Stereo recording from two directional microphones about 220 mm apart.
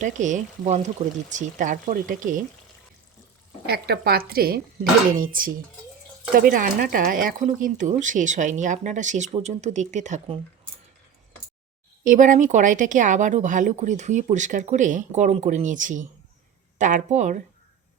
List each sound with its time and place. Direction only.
0.0 s speech: 35° right (ahead or behind)
3.7 s speech: 45° right (ahead or behind)
6.5 s speech: 40° right (ahead or behind)
12.0 s speech: 35° right (ahead or behind)